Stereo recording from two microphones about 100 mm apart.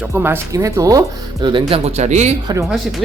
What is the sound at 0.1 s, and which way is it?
Speech, 25° right (ahead or behind).